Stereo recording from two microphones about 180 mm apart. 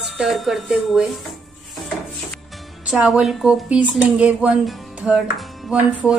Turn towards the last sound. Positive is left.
turn(degrees=0)  # may be behind; listen again after turning